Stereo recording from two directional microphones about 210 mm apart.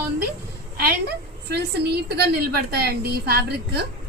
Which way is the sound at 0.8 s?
50° right (ahead or behind).